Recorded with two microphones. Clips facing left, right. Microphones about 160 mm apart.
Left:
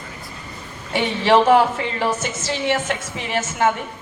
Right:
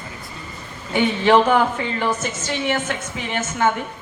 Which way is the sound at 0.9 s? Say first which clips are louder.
Right 1 dB; 30° left (ahead or behind).